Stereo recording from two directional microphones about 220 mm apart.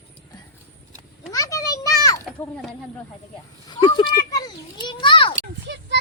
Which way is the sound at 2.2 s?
Centre (ahead or behind).